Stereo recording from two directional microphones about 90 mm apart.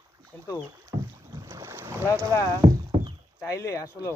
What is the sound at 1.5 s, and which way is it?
Boat, 30° right (ahead or behind).